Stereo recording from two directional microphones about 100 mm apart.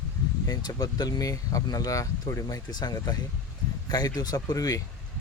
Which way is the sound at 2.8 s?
45° left (ahead or behind).